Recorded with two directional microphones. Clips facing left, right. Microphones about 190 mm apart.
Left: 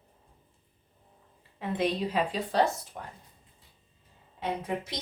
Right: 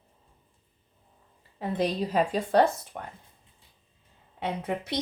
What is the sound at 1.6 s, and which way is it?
A woman's voice, 40° right (ahead or behind).